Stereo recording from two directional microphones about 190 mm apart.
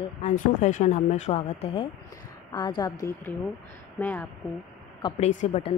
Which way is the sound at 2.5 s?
20° left (ahead or behind).